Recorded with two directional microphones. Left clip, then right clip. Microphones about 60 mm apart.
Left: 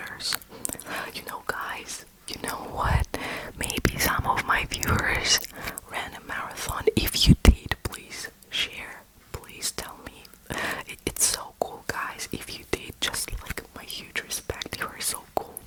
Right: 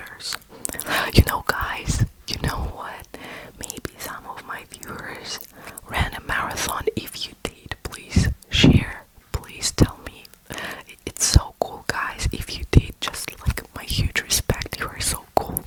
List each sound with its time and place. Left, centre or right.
0.0 s whispering: centre
0.8 s whispering: right
1.1 s whispering: right
1.5 s whispering: right
2.7 s whispering: centre
5.9 s whispering: right
7.0 s whispering: left
7.7 s whispering: centre
8.1 s whispering: right
10.6 s whispering: centre
11.3 s whispering: centre
12.7 s whispering: centre
13.2 s whispering: right
14.6 s whispering: centre